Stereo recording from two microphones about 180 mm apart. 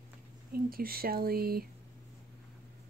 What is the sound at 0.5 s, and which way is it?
Speech, 55° right (ahead or behind).